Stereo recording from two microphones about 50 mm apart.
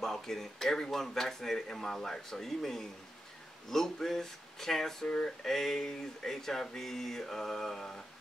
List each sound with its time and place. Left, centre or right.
0.0 s a man's voice: centre
5.0 s a sound: left
5.4 s a man's voice: centre